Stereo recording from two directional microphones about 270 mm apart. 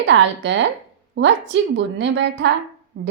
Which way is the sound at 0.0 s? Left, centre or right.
Right.